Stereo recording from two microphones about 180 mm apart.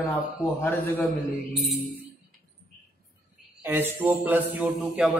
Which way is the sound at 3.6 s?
10° right (ahead or behind).